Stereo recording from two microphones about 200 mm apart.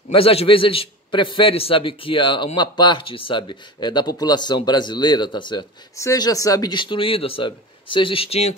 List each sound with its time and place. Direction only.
0.1 s a man's voice: 30° left (ahead or behind)